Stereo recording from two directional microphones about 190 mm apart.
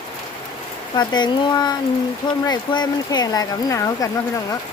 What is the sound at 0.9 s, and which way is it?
Speech, 25° left (ahead or behind).